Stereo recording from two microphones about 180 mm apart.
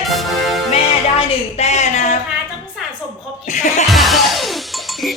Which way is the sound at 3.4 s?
40° left (ahead or behind).